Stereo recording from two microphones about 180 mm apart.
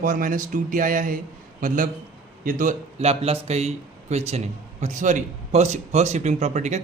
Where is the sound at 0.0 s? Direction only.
50° right (ahead or behind).